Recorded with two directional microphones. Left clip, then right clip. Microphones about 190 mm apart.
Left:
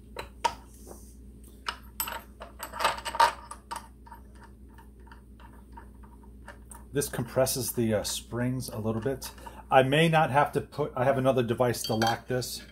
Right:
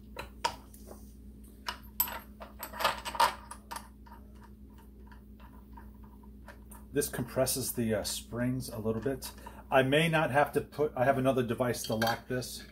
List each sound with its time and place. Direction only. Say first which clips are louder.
1.7 s coin: left 3 dB; 10° left (ahead or behind)
6.9 s speech: left 2 dB; 50° left (ahead or behind)